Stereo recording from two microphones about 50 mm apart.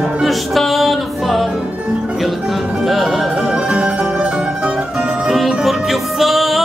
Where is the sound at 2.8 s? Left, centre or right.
Centre.